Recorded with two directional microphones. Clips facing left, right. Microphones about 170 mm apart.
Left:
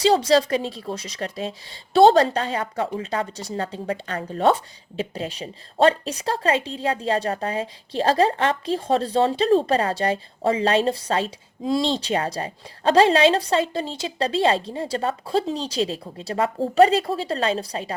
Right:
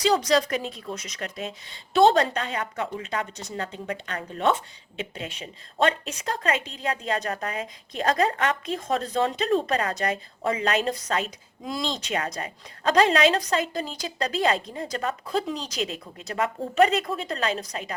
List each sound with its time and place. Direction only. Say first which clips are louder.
0.0 s a woman's voice: left 4 dB; 30° left (ahead or behind)